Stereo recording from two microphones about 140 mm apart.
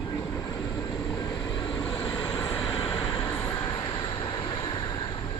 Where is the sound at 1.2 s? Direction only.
30° left (ahead or behind).